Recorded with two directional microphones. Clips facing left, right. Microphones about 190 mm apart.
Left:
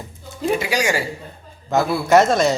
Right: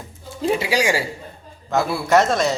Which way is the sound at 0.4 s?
30° right (ahead or behind).